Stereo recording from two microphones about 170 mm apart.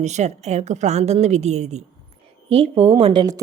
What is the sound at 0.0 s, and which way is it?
A woman's voice, 40° right (ahead or behind).